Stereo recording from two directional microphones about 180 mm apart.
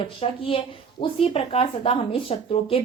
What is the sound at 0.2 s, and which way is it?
A woman's voice, 30° left (ahead or behind).